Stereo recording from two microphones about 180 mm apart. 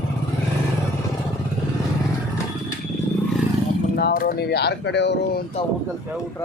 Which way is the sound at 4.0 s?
60° left (ahead or behind).